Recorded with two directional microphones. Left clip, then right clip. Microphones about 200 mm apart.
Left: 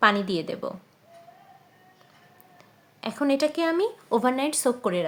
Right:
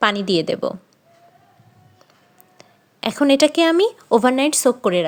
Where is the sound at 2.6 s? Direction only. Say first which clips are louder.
Right 11 dB; 40° right (ahead or behind).